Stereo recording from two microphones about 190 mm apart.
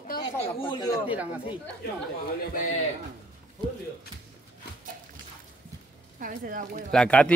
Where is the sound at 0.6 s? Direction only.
25° left (ahead or behind).